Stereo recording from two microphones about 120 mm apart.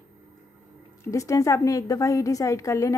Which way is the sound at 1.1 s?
25° left (ahead or behind).